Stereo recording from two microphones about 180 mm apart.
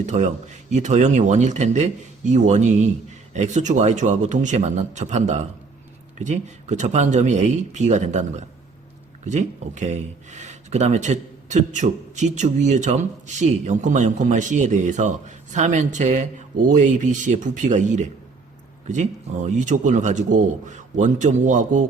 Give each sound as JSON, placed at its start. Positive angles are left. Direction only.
{"t": 0.0, "sound": "speech", "side_deg": -40}
{"t": 19.5, "sound": "speech", "side_deg": -45}